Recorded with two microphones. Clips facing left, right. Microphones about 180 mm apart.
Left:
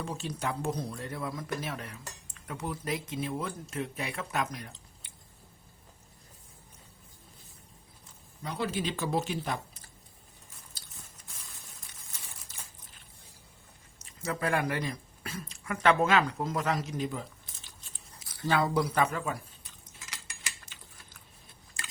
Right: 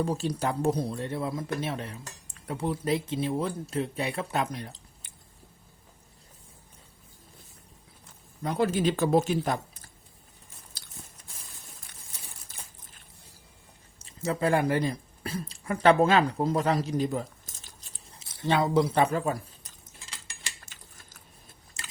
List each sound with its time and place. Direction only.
0.0 s speech: 35° right (ahead or behind)
8.4 s speech: 50° right (ahead or behind)
14.0 s a woman's voice: 30° right (ahead or behind)
18.2 s a sound: 25° right (ahead or behind)
20.7 s typing: 45° right (ahead or behind)